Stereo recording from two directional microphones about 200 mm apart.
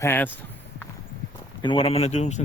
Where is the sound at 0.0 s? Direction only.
10° left (ahead or behind).